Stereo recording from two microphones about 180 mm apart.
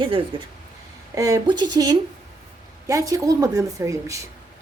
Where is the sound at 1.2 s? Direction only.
20° right (ahead or behind).